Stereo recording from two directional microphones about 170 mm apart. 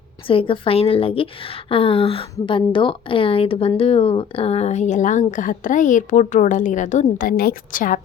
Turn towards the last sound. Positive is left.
turn(degrees=55)  # may be behind; listen again after turning